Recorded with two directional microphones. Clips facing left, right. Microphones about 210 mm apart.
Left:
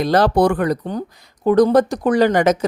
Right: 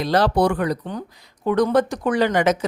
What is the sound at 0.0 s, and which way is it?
Speech, 45° left (ahead or behind).